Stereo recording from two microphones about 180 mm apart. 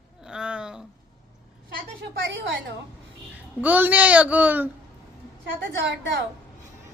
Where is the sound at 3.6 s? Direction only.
10° right (ahead or behind).